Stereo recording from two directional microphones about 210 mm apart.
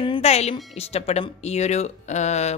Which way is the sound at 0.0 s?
25° left (ahead or behind).